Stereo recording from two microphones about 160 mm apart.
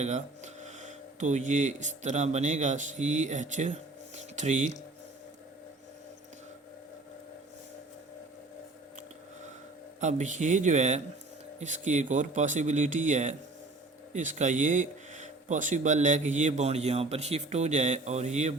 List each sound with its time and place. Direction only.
0.0 s speech: 45° right (ahead or behind)
10.0 s speech: 50° right (ahead or behind)